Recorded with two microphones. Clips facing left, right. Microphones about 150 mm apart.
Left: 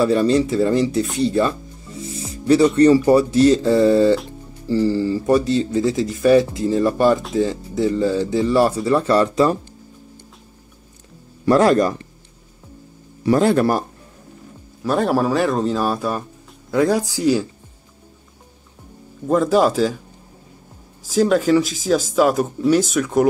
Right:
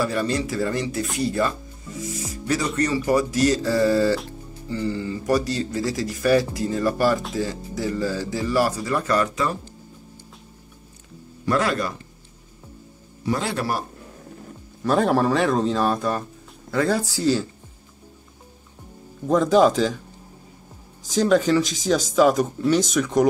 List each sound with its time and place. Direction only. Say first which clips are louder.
0.0 s speech: left 8 dB; 30° left (ahead or behind)
2.0 s music: left 1 dB; 30° left (ahead or behind)
2.7 s speech: left 9 dB; 30° left (ahead or behind)
4.6 s speech: left 9 dB; 35° left (ahead or behind)
11.4 s speech: left 8 dB; 40° left (ahead or behind)
13.2 s a man's voice: left 10 dB; 50° left (ahead or behind)
14.8 s speech: left 1 dB; centre (ahead or behind)
19.2 s speech: left 1 dB; 5° left (ahead or behind)
21.1 s speech: left 3 dB; 5° left (ahead or behind)